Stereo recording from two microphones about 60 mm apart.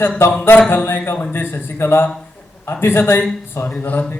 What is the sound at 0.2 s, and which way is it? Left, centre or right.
Speech, left.